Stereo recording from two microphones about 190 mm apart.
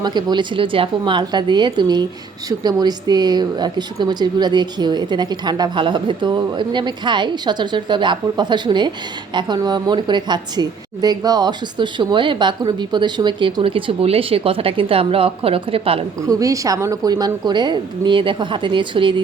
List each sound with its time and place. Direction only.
0.0 s a woman's voice: 20° right (ahead or behind)
16.3 s a woman's voice: 20° right (ahead or behind)